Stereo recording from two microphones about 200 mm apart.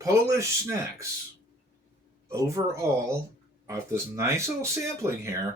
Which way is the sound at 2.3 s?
15° right (ahead or behind).